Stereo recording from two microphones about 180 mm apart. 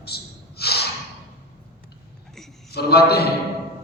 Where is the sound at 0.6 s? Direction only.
60° left (ahead or behind).